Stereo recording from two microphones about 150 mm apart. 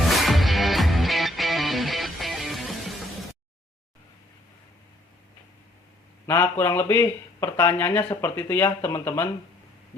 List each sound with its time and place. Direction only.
0.0 s music: centre (ahead or behind)
6.2 s speech: 15° left (ahead or behind)